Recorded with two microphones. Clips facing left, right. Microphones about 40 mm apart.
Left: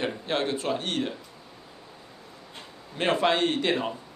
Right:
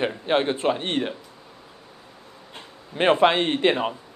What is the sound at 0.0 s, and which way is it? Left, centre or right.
Speech, right.